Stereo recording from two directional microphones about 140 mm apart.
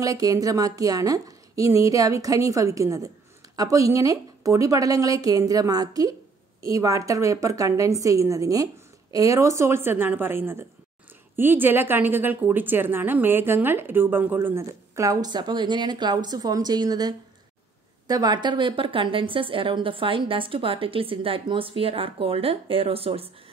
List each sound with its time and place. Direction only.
0.0 s a woman's voice: 25° right (ahead or behind); by 23.3 s 45° right (ahead or behind)